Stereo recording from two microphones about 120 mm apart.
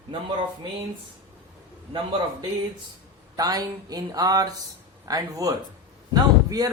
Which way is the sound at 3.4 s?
30° right (ahead or behind).